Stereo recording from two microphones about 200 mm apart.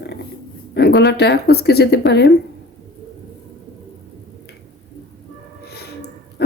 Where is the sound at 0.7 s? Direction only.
55° left (ahead or behind).